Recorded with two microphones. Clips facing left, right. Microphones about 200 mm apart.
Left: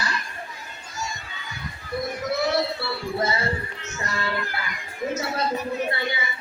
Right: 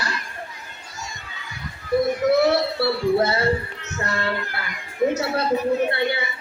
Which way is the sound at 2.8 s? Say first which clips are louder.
Right 7 dB; 65° right (ahead or behind).